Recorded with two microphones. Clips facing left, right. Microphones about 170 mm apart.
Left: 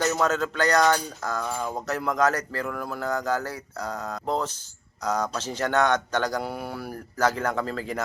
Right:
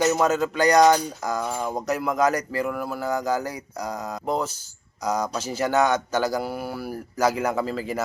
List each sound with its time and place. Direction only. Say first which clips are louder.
0.0 s speech: right 3 dB; 10° right (ahead or behind)